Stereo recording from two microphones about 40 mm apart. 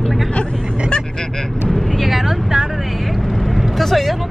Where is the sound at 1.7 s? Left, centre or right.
Centre.